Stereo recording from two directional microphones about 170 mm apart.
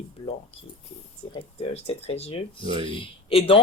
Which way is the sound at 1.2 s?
30° left (ahead or behind).